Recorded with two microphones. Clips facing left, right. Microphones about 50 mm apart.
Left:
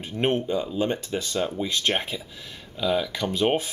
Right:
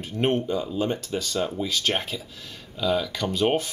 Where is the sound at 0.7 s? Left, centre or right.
Left.